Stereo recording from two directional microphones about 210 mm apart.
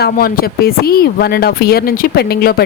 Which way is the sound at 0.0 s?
45° left (ahead or behind).